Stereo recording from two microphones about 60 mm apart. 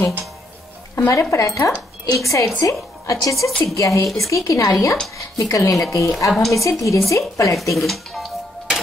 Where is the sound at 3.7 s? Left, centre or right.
Left.